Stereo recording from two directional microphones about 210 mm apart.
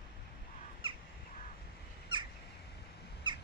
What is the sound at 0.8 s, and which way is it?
Crow, 25° right (ahead or behind).